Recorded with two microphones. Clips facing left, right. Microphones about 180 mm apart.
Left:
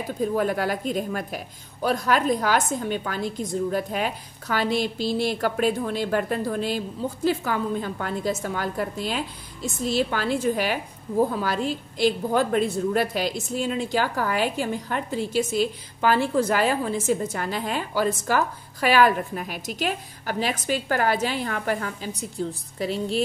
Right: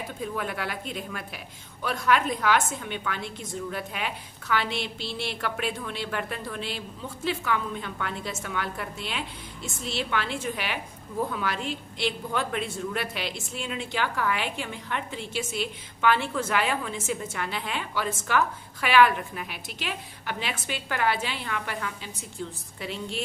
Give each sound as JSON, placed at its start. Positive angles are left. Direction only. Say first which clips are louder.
{"t": 0.2, "sound": "a woman's voice", "louder": "left 9 dB", "side_deg": 40}